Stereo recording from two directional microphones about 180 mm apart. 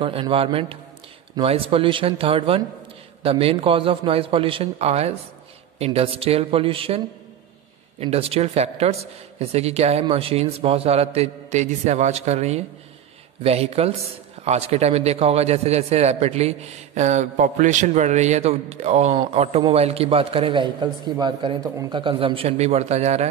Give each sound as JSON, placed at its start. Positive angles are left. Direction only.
{"t": 0.0, "sound": "a man's voice", "side_deg": -30}
{"t": 8.0, "sound": "a man's voice", "side_deg": -35}